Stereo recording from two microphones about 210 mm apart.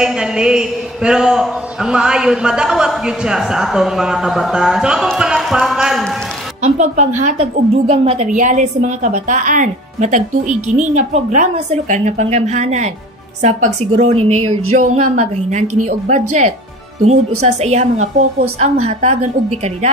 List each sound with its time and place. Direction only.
0.0 s a man's voice: 5° right (ahead or behind)
6.6 s a woman's voice: 35° right (ahead or behind)
15.6 s a woman's voice: 90° right
17.4 s a woman's voice: 30° right (ahead or behind)